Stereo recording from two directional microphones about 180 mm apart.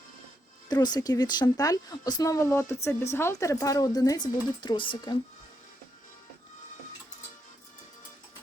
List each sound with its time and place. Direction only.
0.7 s a woman's voice: 25° left (ahead or behind)